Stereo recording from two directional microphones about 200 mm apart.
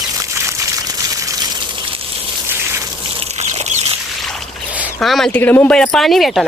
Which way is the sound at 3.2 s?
35° right (ahead or behind).